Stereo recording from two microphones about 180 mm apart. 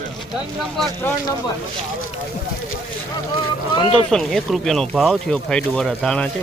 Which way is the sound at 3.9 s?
Centre (ahead or behind).